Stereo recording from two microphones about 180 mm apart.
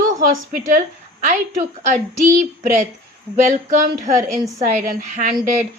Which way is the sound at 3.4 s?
45° right (ahead or behind).